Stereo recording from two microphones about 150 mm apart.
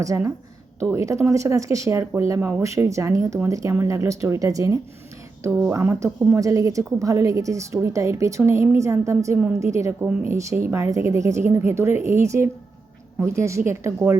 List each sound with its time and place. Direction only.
0.0 s a woman's voice: 20° right (ahead or behind)